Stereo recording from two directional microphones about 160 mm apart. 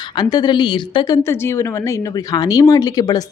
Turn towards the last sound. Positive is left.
turn(degrees=25)  # may be behind; listen again after turning